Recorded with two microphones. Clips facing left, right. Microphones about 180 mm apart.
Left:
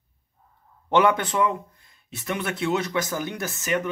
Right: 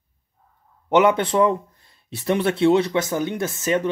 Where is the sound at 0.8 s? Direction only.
20° right (ahead or behind).